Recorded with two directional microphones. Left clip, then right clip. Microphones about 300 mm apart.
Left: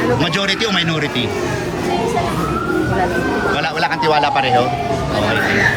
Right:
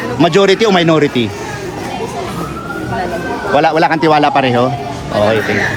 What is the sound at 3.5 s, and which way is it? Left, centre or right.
A man's voice, centre.